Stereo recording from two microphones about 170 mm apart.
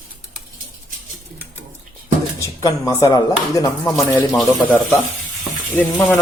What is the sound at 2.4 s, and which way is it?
Speech, 20° left (ahead or behind).